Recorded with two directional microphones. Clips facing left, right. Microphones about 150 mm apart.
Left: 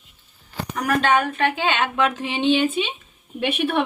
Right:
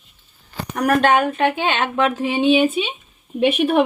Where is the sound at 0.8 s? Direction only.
45° right (ahead or behind).